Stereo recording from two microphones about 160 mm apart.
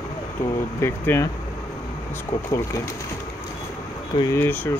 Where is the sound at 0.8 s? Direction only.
15° left (ahead or behind).